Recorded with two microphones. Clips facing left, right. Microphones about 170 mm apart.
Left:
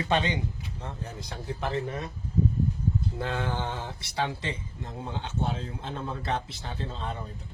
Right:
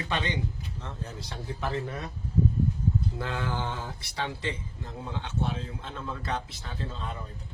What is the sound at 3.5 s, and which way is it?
Speech, 20° left (ahead or behind).